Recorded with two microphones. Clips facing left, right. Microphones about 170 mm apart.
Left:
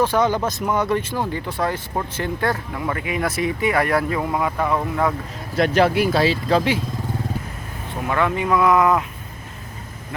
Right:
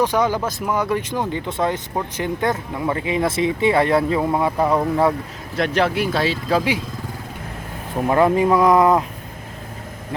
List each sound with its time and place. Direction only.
0.0 s speech: 15° right (ahead or behind); by 4.7 s 30° right (ahead or behind)
5.5 s speech: 5° left (ahead or behind)
8.0 s speech: 35° right (ahead or behind)